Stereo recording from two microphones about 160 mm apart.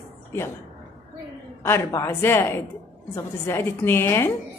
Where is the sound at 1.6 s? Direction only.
15° left (ahead or behind).